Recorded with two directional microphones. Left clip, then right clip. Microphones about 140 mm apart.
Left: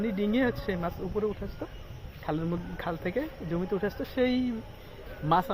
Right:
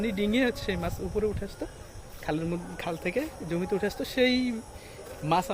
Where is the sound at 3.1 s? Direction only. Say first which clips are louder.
Right 1 dB; 20° right (ahead or behind).